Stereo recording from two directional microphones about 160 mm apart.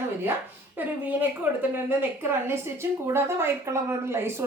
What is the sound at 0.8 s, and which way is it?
Speech, 10° right (ahead or behind).